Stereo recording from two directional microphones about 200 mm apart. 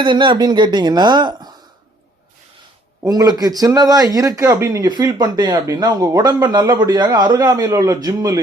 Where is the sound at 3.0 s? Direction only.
20° right (ahead or behind).